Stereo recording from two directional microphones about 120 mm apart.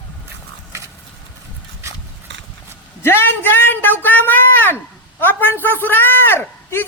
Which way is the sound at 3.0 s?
20° left (ahead or behind).